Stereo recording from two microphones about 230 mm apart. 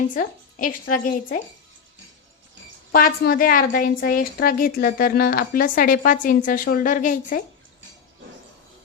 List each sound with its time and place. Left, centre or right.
0.1 s a woman's voice: left
2.9 s a woman's voice: left